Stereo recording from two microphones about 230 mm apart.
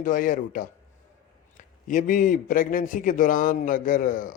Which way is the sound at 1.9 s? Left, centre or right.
Left.